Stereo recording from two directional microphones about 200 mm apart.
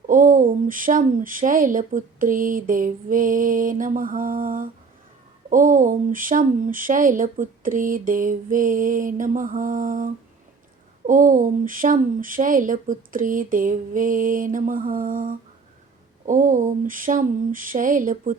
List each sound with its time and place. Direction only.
0.1 s speech: 40° right (ahead or behind)